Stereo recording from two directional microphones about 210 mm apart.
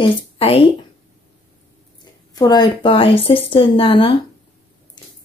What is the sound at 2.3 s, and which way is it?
Speech, 20° left (ahead or behind).